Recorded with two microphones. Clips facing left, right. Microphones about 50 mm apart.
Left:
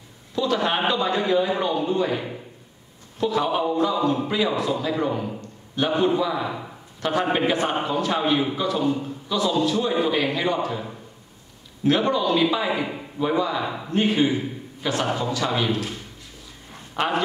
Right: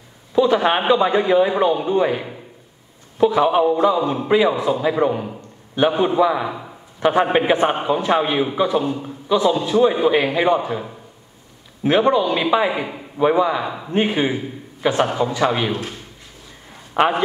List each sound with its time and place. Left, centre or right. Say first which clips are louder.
0.3 s a man's voice: right 7 dB; right
16.9 s a man's voice: right 7 dB; right